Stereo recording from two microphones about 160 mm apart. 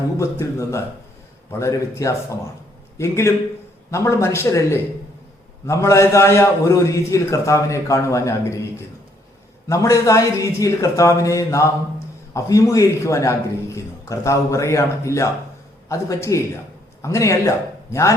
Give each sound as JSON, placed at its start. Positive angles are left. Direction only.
{"t": 0.2, "sound": "a man's voice", "side_deg": 20}
{"t": 9.6, "sound": "a man's voice", "side_deg": 20}